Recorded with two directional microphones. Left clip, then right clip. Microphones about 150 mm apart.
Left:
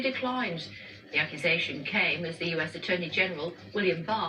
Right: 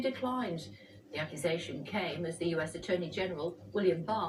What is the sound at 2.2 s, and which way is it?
Speech, 15° right (ahead or behind).